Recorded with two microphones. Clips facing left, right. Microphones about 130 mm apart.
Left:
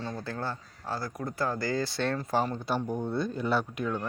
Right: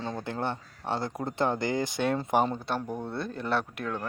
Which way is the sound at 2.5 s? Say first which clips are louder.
Left 2 dB; centre (ahead or behind).